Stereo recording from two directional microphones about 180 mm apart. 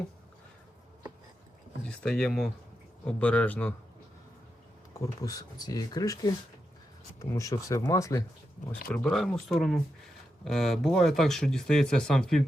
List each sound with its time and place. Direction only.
1.8 s speech: 5° left (ahead or behind)
4.9 s speech: 20° left (ahead or behind)
9.0 s speech: centre (ahead or behind)